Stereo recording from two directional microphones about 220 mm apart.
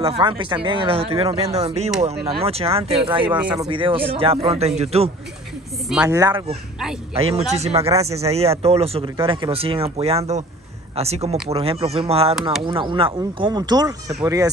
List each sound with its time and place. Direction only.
0.2 s speech: 20° right (ahead or behind)
5.9 s speech: 5° right (ahead or behind)
6.1 s speech: 20° right (ahead or behind)